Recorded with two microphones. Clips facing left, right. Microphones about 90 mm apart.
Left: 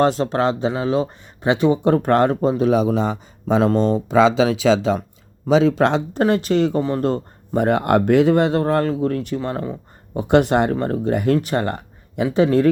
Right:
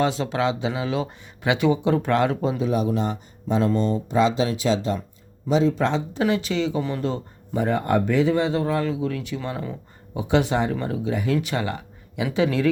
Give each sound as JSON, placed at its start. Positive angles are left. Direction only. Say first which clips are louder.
{"t": 0.0, "sound": "speech", "louder": "left 5 dB", "side_deg": 45}
{"t": 1.8, "sound": "speech", "louder": "left 5 dB", "side_deg": 50}
{"t": 2.6, "sound": "speech", "louder": "left 8 dB", "side_deg": 75}
{"t": 3.5, "sound": "speech", "louder": "left 5 dB", "side_deg": 90}
{"t": 6.1, "sound": "speech", "louder": "left 7 dB", "side_deg": 50}
{"t": 10.2, "sound": "speech", "louder": "left 6 dB", "side_deg": 55}
{"t": 11.3, "sound": "speech", "louder": "left 5 dB", "side_deg": 45}